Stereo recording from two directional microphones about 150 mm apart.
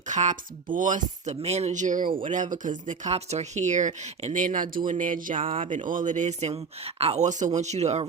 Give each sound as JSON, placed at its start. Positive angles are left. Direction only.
{"t": 0.1, "sound": "speech", "side_deg": -55}
{"t": 5.4, "sound": "speech", "side_deg": -40}
{"t": 5.7, "sound": "speech", "side_deg": -60}